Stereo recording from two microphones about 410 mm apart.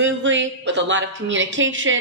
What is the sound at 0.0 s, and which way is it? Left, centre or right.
A woman's voice, right.